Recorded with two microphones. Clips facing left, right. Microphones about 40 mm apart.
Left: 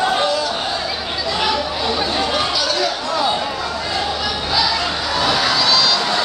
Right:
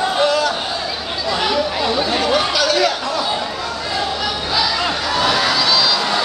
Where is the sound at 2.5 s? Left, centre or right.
Right.